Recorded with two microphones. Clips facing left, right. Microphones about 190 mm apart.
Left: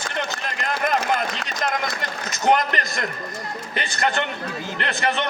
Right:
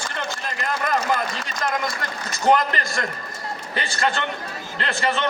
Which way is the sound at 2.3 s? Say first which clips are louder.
Right 1 dB; 20° left (ahead or behind).